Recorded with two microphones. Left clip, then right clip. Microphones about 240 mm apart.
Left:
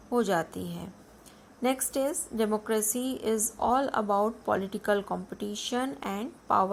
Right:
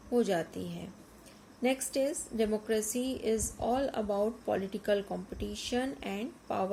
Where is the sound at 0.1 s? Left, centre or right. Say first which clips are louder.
Left 3 dB; centre.